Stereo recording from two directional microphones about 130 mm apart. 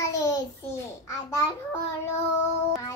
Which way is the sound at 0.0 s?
25° left (ahead or behind).